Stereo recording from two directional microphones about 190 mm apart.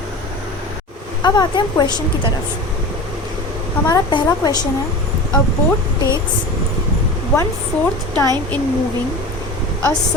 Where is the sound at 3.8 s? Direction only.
20° left (ahead or behind).